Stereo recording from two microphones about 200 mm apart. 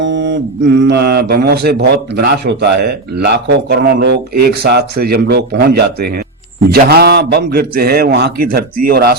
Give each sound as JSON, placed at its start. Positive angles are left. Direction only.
{"t": 0.0, "sound": "mantra", "side_deg": -65}
{"t": 0.8, "sound": "a man's voice", "side_deg": -55}